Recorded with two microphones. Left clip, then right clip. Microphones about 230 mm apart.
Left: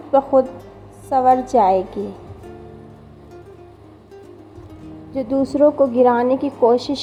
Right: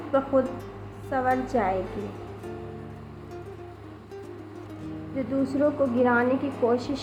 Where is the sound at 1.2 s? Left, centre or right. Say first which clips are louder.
Left 11 dB; left.